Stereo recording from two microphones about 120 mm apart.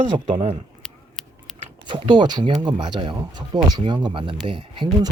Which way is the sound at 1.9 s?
40° right (ahead or behind).